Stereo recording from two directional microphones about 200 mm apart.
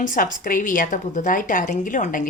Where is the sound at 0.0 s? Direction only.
40° left (ahead or behind).